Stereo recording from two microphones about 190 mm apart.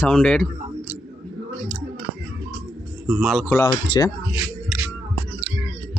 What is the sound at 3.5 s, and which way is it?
Speech, 15° left (ahead or behind).